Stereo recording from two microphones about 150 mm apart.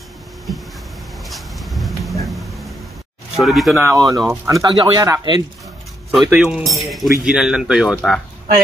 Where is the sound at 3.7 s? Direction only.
20° right (ahead or behind).